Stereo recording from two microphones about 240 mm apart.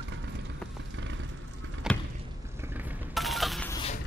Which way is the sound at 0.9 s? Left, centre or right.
Right.